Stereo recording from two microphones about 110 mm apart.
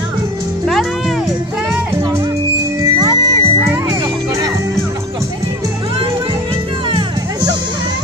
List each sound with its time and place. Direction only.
0.7 s music: centre (ahead or behind)
2.8 s music: 35° right (ahead or behind)